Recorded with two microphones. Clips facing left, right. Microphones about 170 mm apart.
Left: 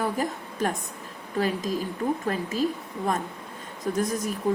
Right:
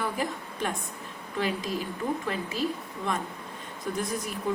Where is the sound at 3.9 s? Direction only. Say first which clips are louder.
Left 5 dB; 40° left (ahead or behind).